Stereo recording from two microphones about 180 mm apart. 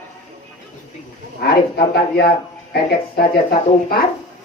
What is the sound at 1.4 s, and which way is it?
Speech, 60° left (ahead or behind).